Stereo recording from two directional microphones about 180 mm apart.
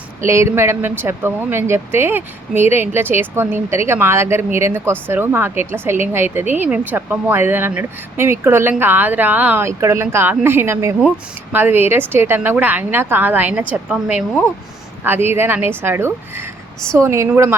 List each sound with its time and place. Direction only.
0.2 s speech: 15° right (ahead or behind)